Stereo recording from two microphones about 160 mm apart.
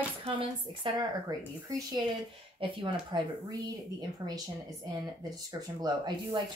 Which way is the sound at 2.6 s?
30° right (ahead or behind).